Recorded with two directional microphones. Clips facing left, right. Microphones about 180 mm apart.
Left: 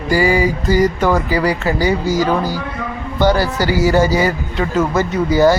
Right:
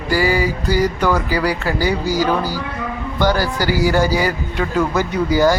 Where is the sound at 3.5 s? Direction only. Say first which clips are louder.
Left 2 dB; 10° right (ahead or behind).